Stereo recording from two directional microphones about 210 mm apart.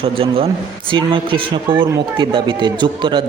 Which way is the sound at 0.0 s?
25° right (ahead or behind).